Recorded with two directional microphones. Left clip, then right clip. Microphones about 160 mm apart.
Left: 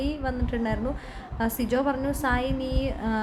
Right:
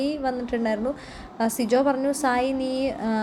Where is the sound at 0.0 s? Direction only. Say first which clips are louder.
Right 4 dB; 15° right (ahead or behind).